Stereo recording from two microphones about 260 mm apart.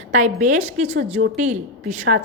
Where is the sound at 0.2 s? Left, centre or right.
Right.